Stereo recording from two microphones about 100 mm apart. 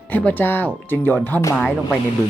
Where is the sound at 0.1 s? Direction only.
15° left (ahead or behind).